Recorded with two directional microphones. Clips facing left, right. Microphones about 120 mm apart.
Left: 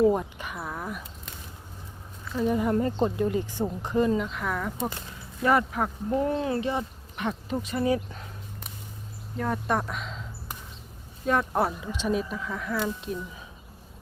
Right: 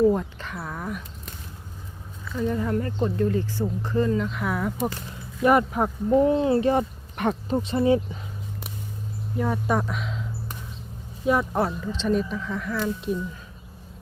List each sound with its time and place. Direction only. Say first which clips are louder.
0.0 s a sound: right 2 dB; 15° left (ahead or behind)
2.3 s speech: left 1 dB; 15° left (ahead or behind)
4.2 s speech: right 3 dB; centre (ahead or behind)
5.4 s speech: right 4 dB; 20° right (ahead or behind)
6.6 s speech: right 7 dB; 50° right (ahead or behind)
7.5 s speech: right 5 dB; 30° right (ahead or behind)
9.4 s speech: right 2 dB; 5° right (ahead or behind)
11.3 s speech: right 3 dB; 5° right (ahead or behind)
11.6 s speech: right 2 dB; 10° left (ahead or behind)